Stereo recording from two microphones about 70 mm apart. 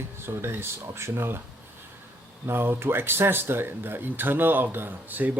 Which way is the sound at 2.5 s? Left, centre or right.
Right.